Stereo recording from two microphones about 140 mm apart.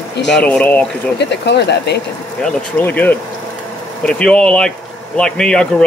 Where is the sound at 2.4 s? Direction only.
10° left (ahead or behind).